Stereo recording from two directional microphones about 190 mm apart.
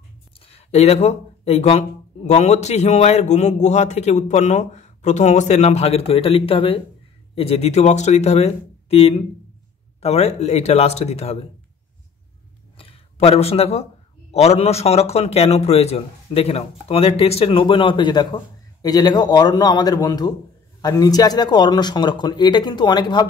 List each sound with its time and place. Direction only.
0.5 s a man's voice: 35° left (ahead or behind)
12.7 s a sound: 30° left (ahead or behind)
14.3 s a man's voice: 35° left (ahead or behind)